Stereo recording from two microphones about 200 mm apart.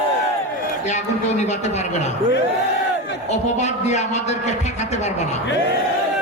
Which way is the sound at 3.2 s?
35° left (ahead or behind).